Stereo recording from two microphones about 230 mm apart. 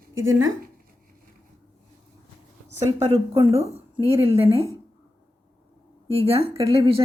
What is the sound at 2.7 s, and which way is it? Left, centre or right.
A woman's voice, right.